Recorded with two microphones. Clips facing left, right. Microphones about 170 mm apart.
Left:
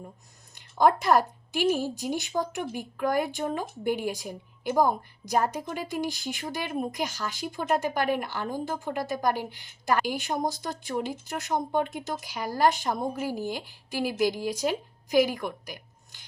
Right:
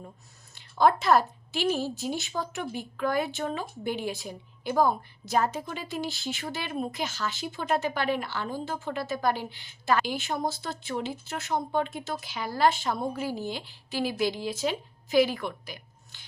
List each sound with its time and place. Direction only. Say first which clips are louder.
0.9 s speech: even; 15° left (ahead or behind)